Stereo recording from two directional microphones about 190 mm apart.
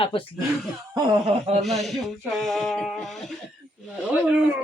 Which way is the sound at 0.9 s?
30° right (ahead or behind).